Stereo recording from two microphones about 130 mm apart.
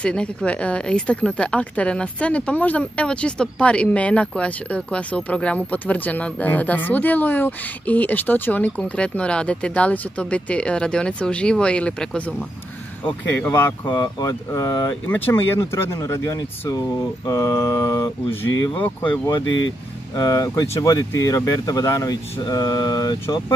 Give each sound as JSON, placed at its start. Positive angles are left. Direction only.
{"t": 0.0, "sound": "speech", "side_deg": 5}
{"t": 13.8, "sound": "speech", "side_deg": 30}
{"t": 15.0, "sound": "speech", "side_deg": 15}
{"t": 20.2, "sound": "speech", "side_deg": 25}